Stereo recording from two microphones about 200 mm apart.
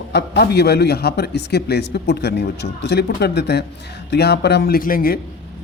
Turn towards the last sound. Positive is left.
turn(degrees=45)  # may be behind; listen again after turning